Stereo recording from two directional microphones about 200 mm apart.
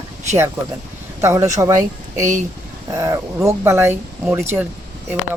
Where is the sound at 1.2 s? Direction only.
15° right (ahead or behind).